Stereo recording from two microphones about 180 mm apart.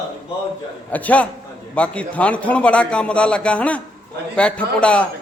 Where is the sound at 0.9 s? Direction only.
10° left (ahead or behind).